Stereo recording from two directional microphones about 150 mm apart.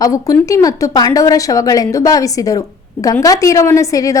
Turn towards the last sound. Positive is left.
turn(degrees=20)  # may be behind; listen again after turning